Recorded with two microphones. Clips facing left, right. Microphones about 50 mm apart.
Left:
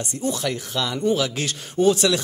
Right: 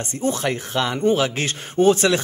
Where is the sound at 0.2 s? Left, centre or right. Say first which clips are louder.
Right 3 dB; right.